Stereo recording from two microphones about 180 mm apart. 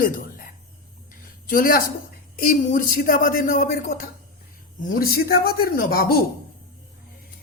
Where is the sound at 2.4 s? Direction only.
45° left (ahead or behind).